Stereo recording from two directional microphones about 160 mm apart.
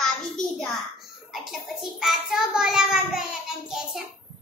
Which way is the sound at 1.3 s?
Centre (ahead or behind).